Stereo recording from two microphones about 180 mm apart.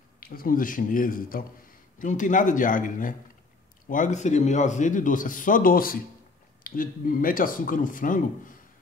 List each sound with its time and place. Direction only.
0.2 s a man's voice: 55° left (ahead or behind)